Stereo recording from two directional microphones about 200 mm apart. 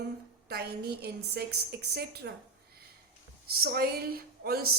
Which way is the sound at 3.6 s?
50° right (ahead or behind).